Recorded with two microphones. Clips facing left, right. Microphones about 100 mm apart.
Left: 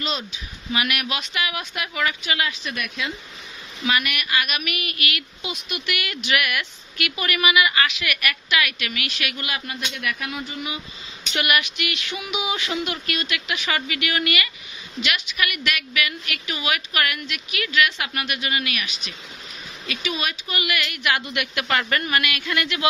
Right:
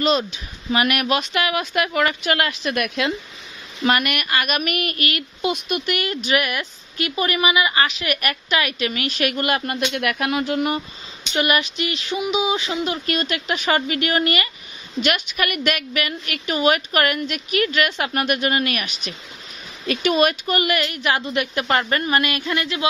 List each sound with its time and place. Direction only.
0.0 s speech: 55° right (ahead or behind)
3.8 s speech: 50° right (ahead or behind)
9.8 s speech: 65° right (ahead or behind)
11.3 s speech: 30° right (ahead or behind)
15.0 s a woman's voice: 50° right (ahead or behind); by 22.8 s 25° right (ahead or behind)